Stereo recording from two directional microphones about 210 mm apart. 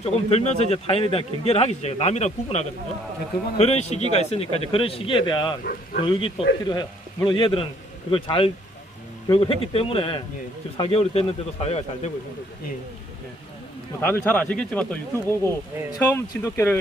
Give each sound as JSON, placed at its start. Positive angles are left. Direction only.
{"t": 0.0, "sound": "a man's voice", "side_deg": 30}
{"t": 5.6, "sound": "speech", "side_deg": 45}
{"t": 6.0, "sound": "a man's voice", "side_deg": 25}
{"t": 14.0, "sound": "speech", "side_deg": 10}